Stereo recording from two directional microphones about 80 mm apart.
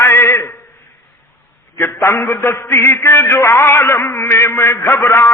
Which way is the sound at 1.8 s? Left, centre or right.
Left.